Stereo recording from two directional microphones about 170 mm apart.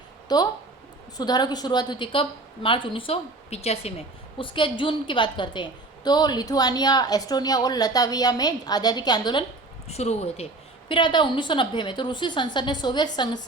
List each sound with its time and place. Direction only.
0.3 s a woman's voice: 25° left (ahead or behind)
9.9 s a woman's voice: 40° left (ahead or behind)